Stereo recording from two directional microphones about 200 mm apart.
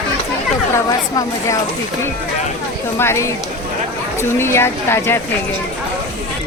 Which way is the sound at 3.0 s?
15° left (ahead or behind).